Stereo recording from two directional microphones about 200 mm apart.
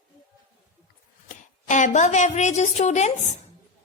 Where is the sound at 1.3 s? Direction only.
40° left (ahead or behind).